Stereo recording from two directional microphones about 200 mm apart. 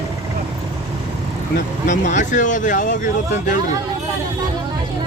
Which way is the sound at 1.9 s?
40° left (ahead or behind).